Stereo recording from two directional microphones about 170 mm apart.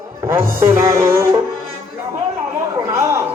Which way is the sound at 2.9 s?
15° right (ahead or behind).